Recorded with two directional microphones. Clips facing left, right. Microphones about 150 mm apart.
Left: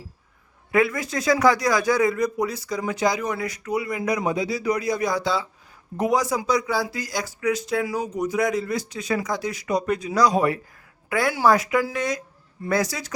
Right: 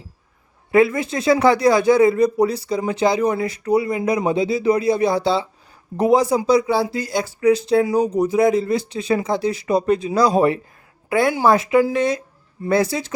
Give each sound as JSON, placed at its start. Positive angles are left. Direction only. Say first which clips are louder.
{"t": 0.7, "sound": "speech", "louder": "right 6 dB", "side_deg": -25}